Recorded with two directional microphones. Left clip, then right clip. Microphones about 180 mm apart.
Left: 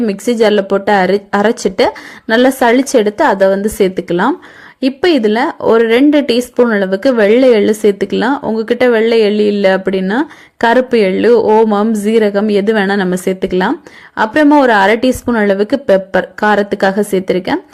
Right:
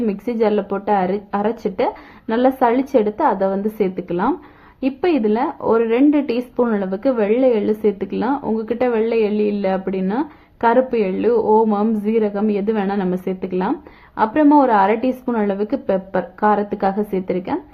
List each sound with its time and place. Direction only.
0.0 s a woman's voice: 30° left (ahead or behind)